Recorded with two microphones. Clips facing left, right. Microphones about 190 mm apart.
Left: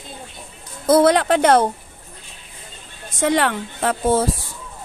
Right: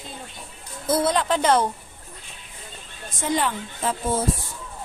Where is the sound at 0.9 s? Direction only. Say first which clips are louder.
Left 7 dB; 75° left (ahead or behind); by 1.6 s 60° left (ahead or behind).